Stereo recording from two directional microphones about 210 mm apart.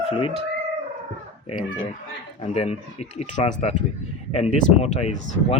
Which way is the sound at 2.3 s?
30° left (ahead or behind).